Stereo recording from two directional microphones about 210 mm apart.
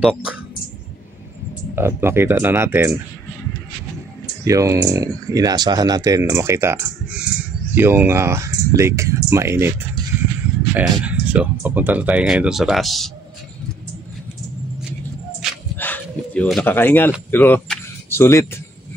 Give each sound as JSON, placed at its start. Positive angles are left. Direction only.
{"t": 0.0, "sound": "speech", "side_deg": 0}
{"t": 1.8, "sound": "speech", "side_deg": -10}
{"t": 4.5, "sound": "speech", "side_deg": -15}
{"t": 15.4, "sound": "dog", "side_deg": 0}
{"t": 15.8, "sound": "a sound", "side_deg": 10}
{"t": 17.3, "sound": "speech", "side_deg": 10}